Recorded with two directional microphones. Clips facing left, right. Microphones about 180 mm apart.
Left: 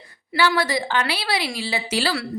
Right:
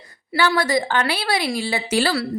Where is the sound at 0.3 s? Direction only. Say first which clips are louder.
Right 2 dB; 50° right (ahead or behind).